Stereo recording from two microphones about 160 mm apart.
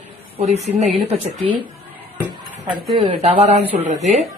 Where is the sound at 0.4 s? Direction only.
45° right (ahead or behind).